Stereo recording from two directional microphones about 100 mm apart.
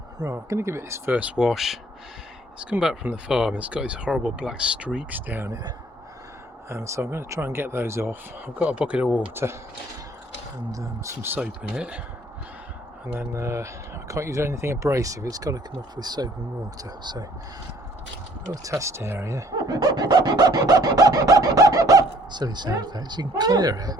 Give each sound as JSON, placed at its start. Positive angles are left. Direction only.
{"t": 0.2, "sound": "speech", "side_deg": -30}
{"t": 1.1, "sound": "speech", "side_deg": -15}
{"t": 1.5, "sound": "speech", "side_deg": 0}
{"t": 6.7, "sound": "speech", "side_deg": -30}
{"t": 8.6, "sound": "speech", "side_deg": -10}
{"t": 9.1, "sound": "speech", "side_deg": -25}
{"t": 10.7, "sound": "speech", "side_deg": -30}
{"t": 11.3, "sound": "speech", "side_deg": -10}
{"t": 13.1, "sound": "speech", "side_deg": -30}
{"t": 18.5, "sound": "speech", "side_deg": -35}